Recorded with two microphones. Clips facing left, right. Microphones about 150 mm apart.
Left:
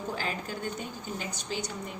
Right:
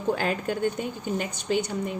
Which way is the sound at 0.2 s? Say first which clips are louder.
Right 8 dB; 65° right (ahead or behind).